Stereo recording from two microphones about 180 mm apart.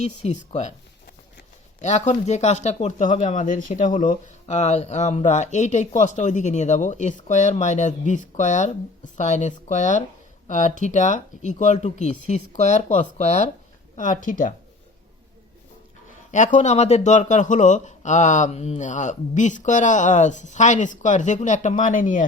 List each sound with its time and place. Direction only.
0.0 s speech: 35° left (ahead or behind)
1.8 s speech: 40° left (ahead or behind)
16.3 s speech: 40° left (ahead or behind)